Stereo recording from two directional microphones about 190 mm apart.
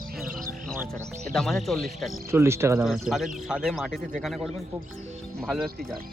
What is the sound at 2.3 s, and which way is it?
Speech, 15° right (ahead or behind).